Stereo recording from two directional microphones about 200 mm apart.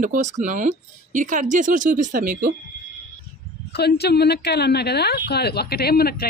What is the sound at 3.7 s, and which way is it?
Speech, 55° left (ahead or behind).